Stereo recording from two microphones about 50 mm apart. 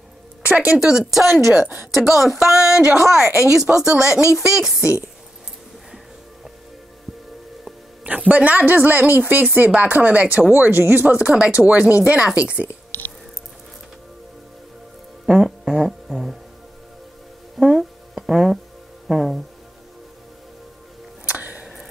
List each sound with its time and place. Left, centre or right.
0.4 s music: right
0.7 s a woman's voice: centre
8.0 s speech: right
10.5 s speech: right
11.1 s speech: right
15.3 s speech: centre
17.6 s music: centre
19.0 s a woman's voice: centre
21.3 s music: right